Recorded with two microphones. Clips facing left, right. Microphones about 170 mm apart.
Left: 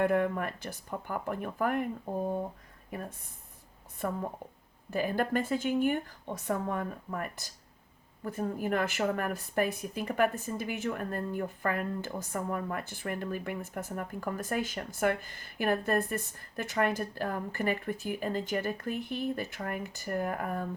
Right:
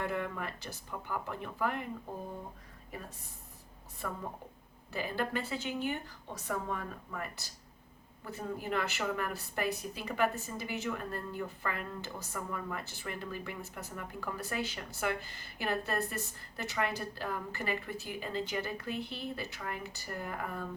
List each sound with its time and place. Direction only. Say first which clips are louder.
0.0 s speech: left 8 dB; 55° left (ahead or behind)
4.9 s speech: left 6 dB; 50° left (ahead or behind)